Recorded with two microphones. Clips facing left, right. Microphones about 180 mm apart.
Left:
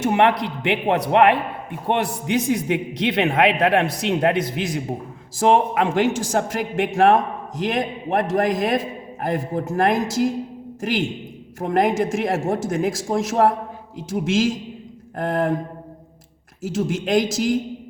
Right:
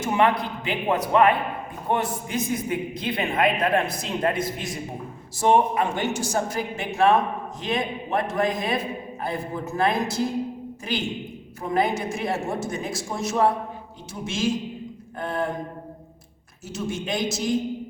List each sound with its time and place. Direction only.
0.0 s a man's voice: 65° left (ahead or behind)
5.4 s a man's voice: 90° left
16.6 s a man's voice: 90° left